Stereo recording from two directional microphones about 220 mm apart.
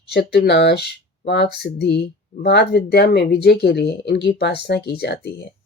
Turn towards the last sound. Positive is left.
turn(degrees=45)  # may be behind; listen again after turning